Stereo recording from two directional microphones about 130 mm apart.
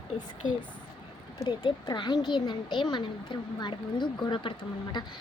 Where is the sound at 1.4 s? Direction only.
30° left (ahead or behind).